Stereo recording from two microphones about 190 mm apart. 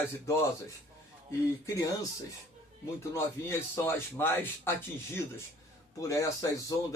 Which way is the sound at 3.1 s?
10° left (ahead or behind).